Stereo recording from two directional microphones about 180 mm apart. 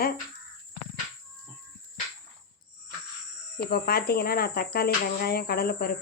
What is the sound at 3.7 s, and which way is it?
Speech, 60° left (ahead or behind).